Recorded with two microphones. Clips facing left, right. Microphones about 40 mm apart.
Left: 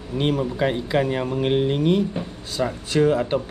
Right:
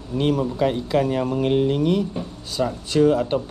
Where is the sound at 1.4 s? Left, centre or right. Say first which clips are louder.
Right 1 dB; left.